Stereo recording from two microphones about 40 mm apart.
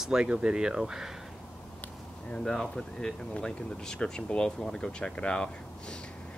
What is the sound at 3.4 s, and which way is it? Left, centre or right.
Speech, centre.